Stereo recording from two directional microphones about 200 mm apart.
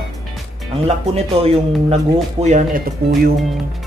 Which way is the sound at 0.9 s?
30° right (ahead or behind).